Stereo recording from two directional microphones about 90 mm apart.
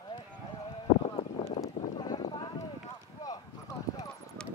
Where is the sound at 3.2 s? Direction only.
45° left (ahead or behind).